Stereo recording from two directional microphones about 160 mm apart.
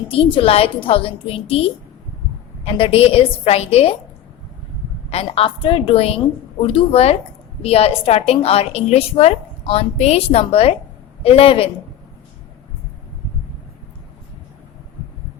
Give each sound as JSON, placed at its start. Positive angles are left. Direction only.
{"t": 0.1, "sound": "a woman's voice", "side_deg": 35}
{"t": 5.1, "sound": "a woman's voice", "side_deg": 35}